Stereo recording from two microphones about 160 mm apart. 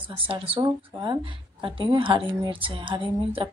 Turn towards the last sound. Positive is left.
turn(degrees=-35)  # may be behind; listen again after turning